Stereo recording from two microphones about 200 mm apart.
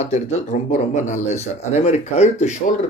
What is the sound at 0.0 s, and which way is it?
Speech, 35° left (ahead or behind).